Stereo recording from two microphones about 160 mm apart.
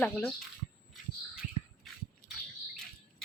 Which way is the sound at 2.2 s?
65° left (ahead or behind).